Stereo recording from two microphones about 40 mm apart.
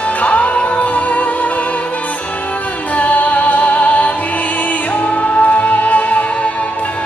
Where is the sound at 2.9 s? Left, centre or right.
Left.